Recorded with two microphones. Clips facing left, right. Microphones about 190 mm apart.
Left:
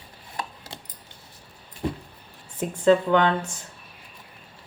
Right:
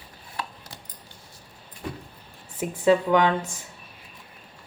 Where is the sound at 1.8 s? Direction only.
30° left (ahead or behind).